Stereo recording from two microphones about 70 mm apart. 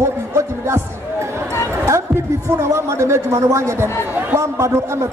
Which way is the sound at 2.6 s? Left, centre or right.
Right.